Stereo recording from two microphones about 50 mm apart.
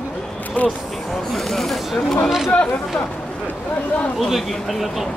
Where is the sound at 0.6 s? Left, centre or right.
Left.